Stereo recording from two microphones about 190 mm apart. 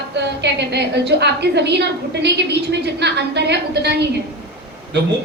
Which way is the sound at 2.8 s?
65° right (ahead or behind).